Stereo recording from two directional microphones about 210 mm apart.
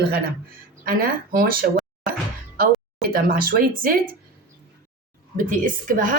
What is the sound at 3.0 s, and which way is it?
Speech, 45° right (ahead or behind).